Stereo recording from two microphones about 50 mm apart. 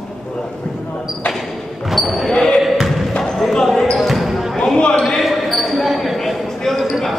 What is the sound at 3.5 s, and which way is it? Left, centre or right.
Basketball bounce, centre.